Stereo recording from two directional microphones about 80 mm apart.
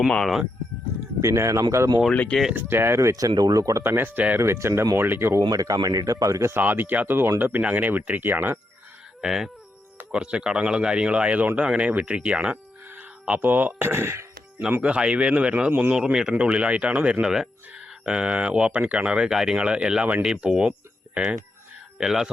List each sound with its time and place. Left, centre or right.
0.1 s speech: centre
1.2 s speech: right
2.6 s speech: right
3.8 s speech: right
4.4 s speech: right
5.4 s speech: right
6.5 s speech: right
9.2 s speech: centre; by 14.3 s right
14.7 s speech: centre
21.9 s speech: centre